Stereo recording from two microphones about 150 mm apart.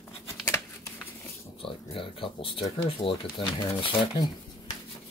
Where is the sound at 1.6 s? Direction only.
40° left (ahead or behind).